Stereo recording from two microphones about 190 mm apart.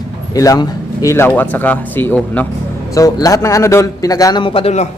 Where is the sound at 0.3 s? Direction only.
15° left (ahead or behind); by 4.9 s 35° left (ahead or behind).